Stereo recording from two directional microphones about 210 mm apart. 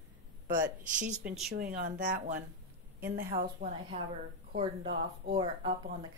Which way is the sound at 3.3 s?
40° right (ahead or behind).